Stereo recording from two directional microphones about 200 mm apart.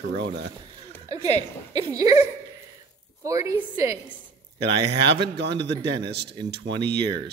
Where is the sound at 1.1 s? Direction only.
20° right (ahead or behind).